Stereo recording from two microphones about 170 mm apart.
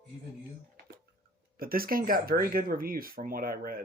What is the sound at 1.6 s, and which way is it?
Speech, 60° right (ahead or behind).